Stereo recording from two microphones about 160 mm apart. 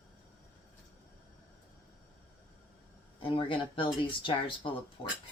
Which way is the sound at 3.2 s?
35° left (ahead or behind).